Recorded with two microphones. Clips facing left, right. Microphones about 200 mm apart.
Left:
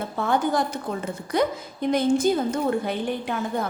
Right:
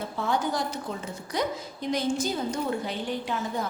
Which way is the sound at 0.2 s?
55° left (ahead or behind).